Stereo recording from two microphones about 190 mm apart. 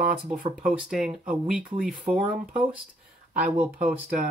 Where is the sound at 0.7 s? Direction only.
5° right (ahead or behind).